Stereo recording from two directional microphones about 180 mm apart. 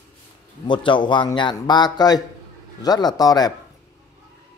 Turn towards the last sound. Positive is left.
turn(degrees=20)  # may be behind; listen again after turning